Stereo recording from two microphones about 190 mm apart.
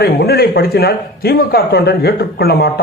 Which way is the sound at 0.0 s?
55° left (ahead or behind).